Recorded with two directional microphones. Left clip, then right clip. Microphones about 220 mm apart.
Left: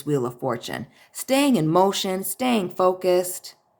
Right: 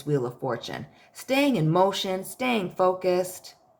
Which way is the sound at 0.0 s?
25° left (ahead or behind).